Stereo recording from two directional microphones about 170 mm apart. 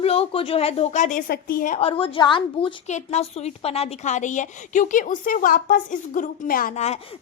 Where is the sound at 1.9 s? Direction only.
30° left (ahead or behind).